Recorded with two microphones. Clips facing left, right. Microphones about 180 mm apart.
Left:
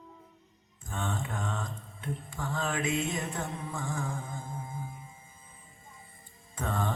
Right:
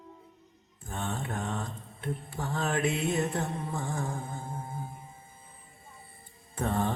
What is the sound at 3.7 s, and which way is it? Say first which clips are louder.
Mantra: right 2 dB; 40° right (ahead or behind).